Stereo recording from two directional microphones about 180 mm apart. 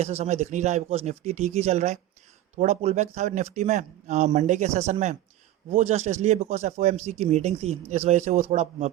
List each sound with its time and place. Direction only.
0.0 s speech: 35° right (ahead or behind)